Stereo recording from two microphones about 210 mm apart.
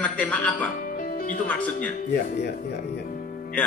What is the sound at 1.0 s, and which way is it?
Music, 40° left (ahead or behind).